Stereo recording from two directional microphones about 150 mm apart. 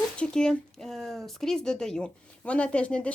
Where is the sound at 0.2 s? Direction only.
5° left (ahead or behind).